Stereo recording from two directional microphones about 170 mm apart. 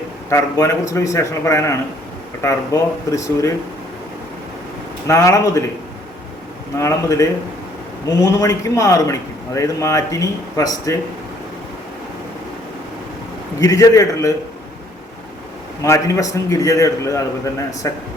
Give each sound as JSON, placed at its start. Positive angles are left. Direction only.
{"t": 0.3, "sound": "a man's voice", "side_deg": 15}
{"t": 2.7, "sound": "a man's voice", "side_deg": 20}
{"t": 5.0, "sound": "a man's voice", "side_deg": 15}
{"t": 6.7, "sound": "a man's voice", "side_deg": 15}
{"t": 13.6, "sound": "a man's voice", "side_deg": 20}
{"t": 15.8, "sound": "a man's voice", "side_deg": 20}